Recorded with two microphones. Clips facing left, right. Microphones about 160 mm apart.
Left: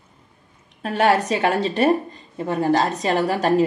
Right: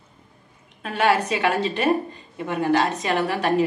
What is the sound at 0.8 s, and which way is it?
A woman's voice, 40° left (ahead or behind).